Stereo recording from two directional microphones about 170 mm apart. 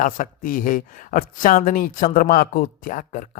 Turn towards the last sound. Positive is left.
turn(degrees=50)  # may be behind; listen again after turning